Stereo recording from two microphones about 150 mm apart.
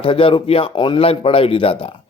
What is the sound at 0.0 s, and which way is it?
Speech, 35° left (ahead or behind).